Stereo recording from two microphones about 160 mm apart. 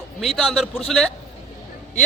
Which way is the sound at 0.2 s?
Centre (ahead or behind).